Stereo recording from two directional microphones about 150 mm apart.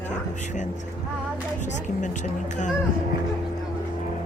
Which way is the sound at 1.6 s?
55° left (ahead or behind).